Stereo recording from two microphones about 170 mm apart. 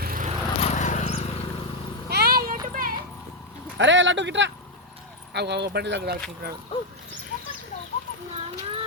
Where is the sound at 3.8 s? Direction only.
90° right.